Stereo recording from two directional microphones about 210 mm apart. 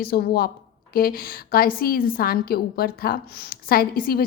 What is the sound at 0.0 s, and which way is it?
A woman's voice, 45° left (ahead or behind).